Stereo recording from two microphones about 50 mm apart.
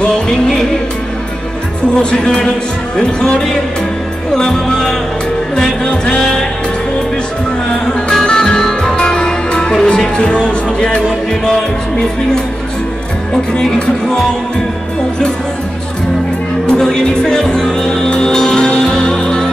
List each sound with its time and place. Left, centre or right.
0.0 s speech: centre
2.0 s speech: centre
4.4 s music: centre
5.6 s speech: centre
7.8 s music: centre
13.3 s speech: centre
16.6 s music: centre